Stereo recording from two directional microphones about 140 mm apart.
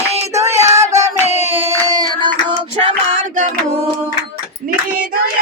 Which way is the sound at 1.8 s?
30° right (ahead or behind).